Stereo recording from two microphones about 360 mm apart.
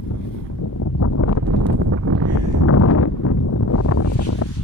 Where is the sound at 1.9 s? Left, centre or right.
Right.